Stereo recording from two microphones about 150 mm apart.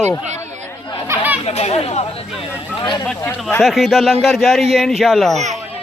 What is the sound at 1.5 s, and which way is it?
Speech, 45° left (ahead or behind).